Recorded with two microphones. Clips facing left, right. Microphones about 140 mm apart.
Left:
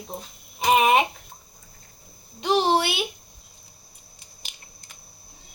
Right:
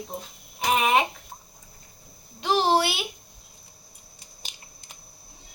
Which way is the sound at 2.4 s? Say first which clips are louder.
Left 1 dB; centre (ahead or behind).